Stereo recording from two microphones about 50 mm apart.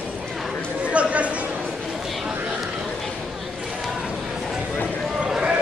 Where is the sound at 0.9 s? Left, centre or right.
Right.